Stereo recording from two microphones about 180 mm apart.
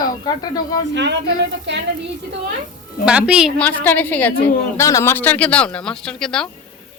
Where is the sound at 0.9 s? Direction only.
75° right (ahead or behind).